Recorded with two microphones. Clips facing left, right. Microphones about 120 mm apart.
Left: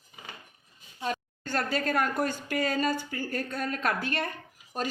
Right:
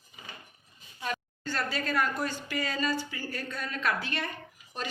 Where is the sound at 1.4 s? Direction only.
50° left (ahead or behind).